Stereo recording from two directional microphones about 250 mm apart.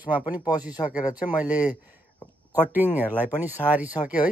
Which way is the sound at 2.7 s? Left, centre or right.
Centre.